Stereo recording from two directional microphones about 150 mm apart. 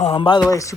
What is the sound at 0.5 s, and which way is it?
Speech, 20° left (ahead or behind).